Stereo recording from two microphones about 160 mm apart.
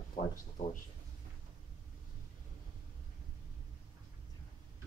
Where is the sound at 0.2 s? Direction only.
50° left (ahead or behind).